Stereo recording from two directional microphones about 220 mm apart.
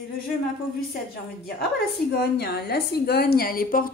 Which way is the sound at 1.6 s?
45° left (ahead or behind).